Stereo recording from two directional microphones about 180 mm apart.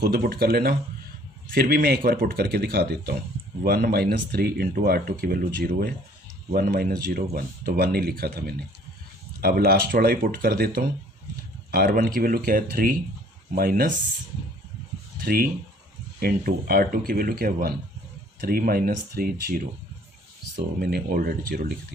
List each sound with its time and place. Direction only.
0.0 s speech: 60° right (ahead or behind)
15.2 s speech: 55° right (ahead or behind)
20.8 s speech: 55° right (ahead or behind)